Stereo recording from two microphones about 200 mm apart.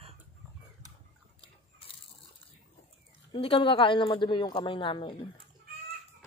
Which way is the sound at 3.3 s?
25° left (ahead or behind).